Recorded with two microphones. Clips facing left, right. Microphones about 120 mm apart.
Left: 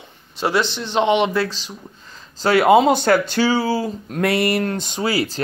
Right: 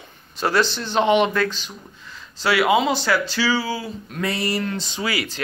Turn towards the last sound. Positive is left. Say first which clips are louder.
# left 5 dB
turn(degrees=35)  # may be behind; listen again after turning